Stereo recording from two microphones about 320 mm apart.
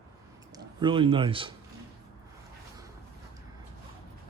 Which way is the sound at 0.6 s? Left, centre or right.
Centre.